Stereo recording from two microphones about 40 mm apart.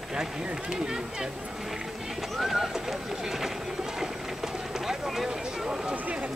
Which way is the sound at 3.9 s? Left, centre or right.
Centre.